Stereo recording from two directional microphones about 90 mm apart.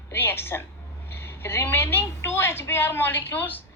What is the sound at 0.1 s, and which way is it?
A woman's voice, 25° left (ahead or behind).